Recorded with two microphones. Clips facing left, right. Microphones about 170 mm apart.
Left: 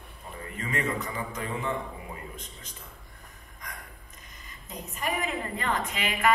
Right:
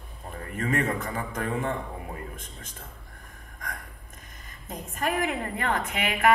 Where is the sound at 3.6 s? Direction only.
50° right (ahead or behind).